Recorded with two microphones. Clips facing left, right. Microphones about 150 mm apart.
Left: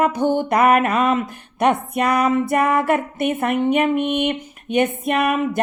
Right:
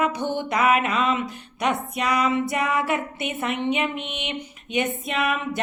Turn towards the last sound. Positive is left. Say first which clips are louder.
# left 6 dB
turn(degrees=50)  # may be behind; listen again after turning